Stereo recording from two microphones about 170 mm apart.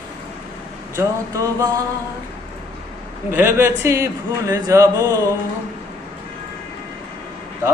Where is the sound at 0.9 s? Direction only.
20° right (ahead or behind).